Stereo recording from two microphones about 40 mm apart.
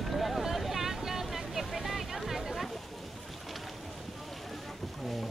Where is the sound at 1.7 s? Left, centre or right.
Centre.